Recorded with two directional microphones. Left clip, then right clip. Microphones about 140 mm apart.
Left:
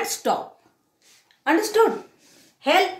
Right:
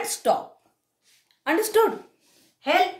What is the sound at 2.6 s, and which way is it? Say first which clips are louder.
Speech: left 3 dB; 10° left (ahead or behind).